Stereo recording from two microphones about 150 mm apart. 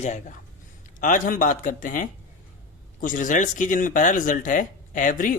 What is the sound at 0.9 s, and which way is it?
Speech, 60° left (ahead or behind).